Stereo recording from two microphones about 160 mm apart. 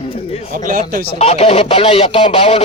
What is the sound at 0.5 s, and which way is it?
Speech, 55° right (ahead or behind).